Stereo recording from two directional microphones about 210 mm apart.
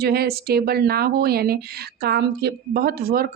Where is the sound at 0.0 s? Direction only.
50° right (ahead or behind).